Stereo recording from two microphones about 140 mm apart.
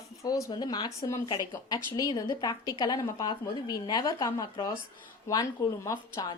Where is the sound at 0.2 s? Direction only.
20° left (ahead or behind).